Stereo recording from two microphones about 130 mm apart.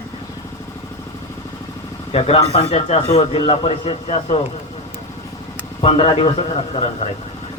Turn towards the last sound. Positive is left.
turn(degrees=50)  # may be behind; listen again after turning